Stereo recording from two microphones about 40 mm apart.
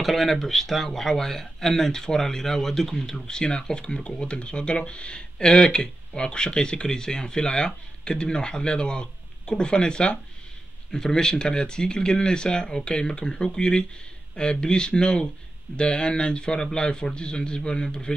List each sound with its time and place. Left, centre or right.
0.0 s speech: centre